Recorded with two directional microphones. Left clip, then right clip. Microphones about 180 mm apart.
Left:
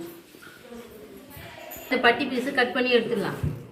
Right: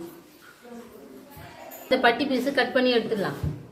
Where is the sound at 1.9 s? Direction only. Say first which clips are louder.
Even; 55° right (ahead or behind).